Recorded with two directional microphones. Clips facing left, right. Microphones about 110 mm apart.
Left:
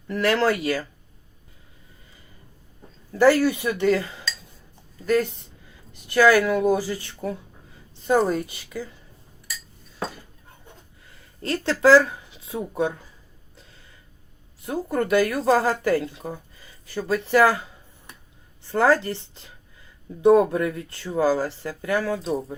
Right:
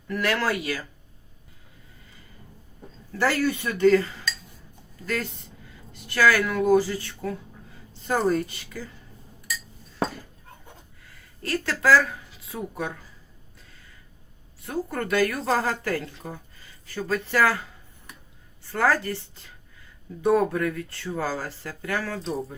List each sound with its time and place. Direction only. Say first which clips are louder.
0.1 s speech: left 4 dB; 30° left (ahead or behind)
3.1 s a man's voice: left 7 dB; 20° left (ahead or behind)
5.0 s speech: left 8 dB; 20° left (ahead or behind)
11.4 s speech: left 5 dB; 25° left (ahead or behind)
14.6 s speech: left 4 dB; 20° left (ahead or behind)
18.7 s speech: left 4 dB; 25° left (ahead or behind)